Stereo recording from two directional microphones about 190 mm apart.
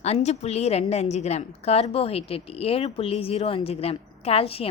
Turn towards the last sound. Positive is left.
turn(degrees=30)  # may be behind; listen again after turning